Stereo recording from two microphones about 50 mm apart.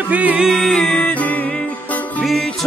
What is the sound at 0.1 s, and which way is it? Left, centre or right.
Music, right.